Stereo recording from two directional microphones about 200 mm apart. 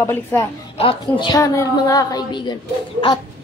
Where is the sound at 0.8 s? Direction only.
25° left (ahead or behind).